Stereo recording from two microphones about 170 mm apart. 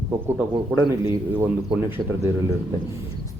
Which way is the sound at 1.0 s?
10° right (ahead or behind).